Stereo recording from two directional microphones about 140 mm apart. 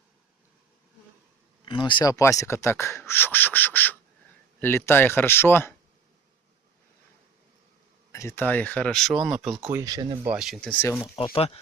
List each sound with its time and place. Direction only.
1.6 s speech: 35° left (ahead or behind); by 5.7 s 15° left (ahead or behind)
8.1 s speech: 20° left (ahead or behind); by 9.6 s centre (ahead or behind)
9.7 s speech: 25° right (ahead or behind)
10.2 s speech: 5° right (ahead or behind)
10.8 s speech: 20° left (ahead or behind)
11.3 s speech: 45° left (ahead or behind)